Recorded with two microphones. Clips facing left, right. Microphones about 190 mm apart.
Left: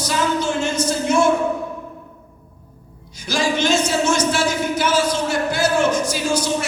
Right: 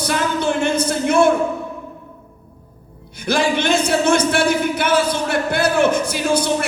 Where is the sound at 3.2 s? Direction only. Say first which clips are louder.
Right 2 dB; 60° right (ahead or behind).